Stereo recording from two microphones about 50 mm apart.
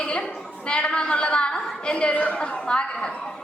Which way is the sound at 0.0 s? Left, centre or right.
Left.